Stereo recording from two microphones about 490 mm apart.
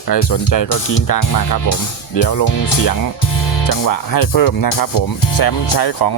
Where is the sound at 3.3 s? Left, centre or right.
Left.